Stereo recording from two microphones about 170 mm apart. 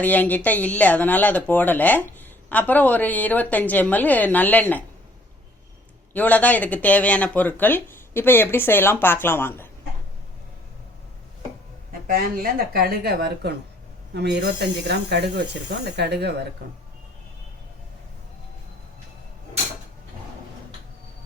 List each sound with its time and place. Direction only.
0.0 s speech: 10° left (ahead or behind)
6.1 s speech: 10° left (ahead or behind)
11.9 s speech: 60° right (ahead or behind); by 16.3 s 75° right (ahead or behind)